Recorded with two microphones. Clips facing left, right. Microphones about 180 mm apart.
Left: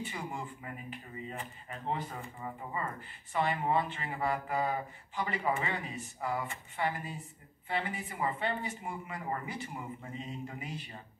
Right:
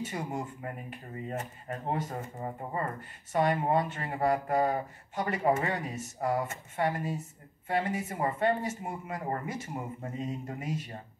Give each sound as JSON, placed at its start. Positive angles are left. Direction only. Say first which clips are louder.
{"t": 0.0, "sound": "speech", "louder": "right 5 dB", "side_deg": -45}